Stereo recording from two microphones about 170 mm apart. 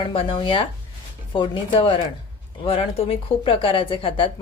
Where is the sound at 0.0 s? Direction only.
30° left (ahead or behind).